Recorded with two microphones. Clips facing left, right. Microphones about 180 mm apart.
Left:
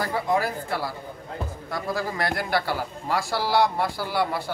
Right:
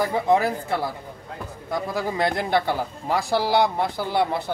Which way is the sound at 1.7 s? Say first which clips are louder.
Right 3 dB; 20° right (ahead or behind).